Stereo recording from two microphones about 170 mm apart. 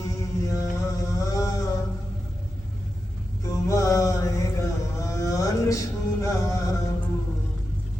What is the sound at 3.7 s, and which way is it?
Mantra, 20° left (ahead or behind).